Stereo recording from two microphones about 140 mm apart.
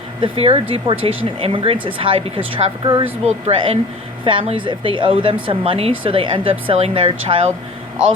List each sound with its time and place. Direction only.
0.2 s speech: 40° right (ahead or behind)
3.2 s speech: 45° right (ahead or behind)